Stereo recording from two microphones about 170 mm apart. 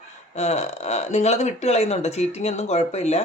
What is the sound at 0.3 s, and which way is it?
Speech, 40° left (ahead or behind).